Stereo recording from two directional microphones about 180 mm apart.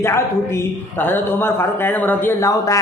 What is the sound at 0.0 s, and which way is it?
A man's voice, 15° left (ahead or behind).